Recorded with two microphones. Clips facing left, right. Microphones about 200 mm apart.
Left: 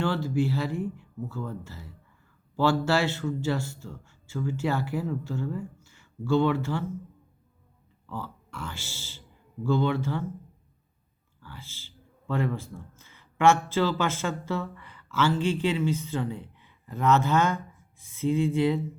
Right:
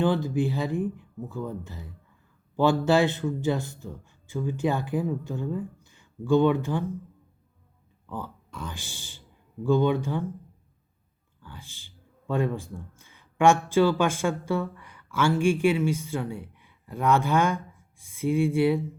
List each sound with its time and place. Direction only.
0.0 s speech: 15° right (ahead or behind)
8.0 s speech: 15° right (ahead or behind)
11.4 s speech: 15° right (ahead or behind)